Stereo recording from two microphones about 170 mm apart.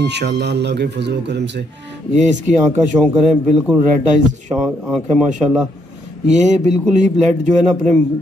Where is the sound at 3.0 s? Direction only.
Centre (ahead or behind).